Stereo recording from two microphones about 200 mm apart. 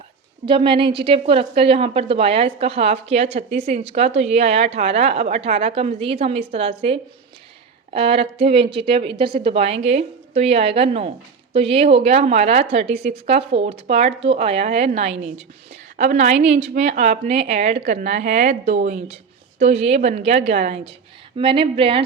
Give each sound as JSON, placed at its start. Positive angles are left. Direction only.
{"t": 0.4, "sound": "a woman's voice", "side_deg": -25}